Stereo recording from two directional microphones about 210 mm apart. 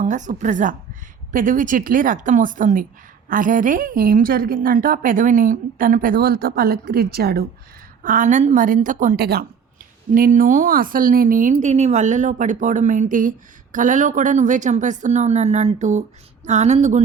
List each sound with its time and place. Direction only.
0.0 s a woman's voice: 35° right (ahead or behind)
8.0 s a woman's voice: 40° right (ahead or behind)